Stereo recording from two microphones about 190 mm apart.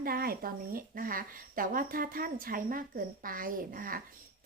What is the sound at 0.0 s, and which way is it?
Speech, 50° right (ahead or behind).